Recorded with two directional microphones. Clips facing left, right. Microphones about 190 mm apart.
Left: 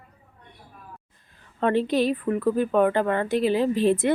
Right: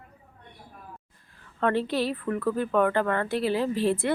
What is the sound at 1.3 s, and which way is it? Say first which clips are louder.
Speech: left 3 dB; 20° left (ahead or behind).